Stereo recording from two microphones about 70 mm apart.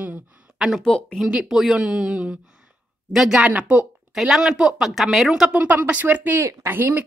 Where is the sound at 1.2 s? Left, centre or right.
Centre.